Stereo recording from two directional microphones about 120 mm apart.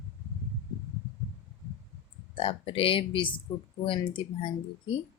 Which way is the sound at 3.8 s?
50° left (ahead or behind).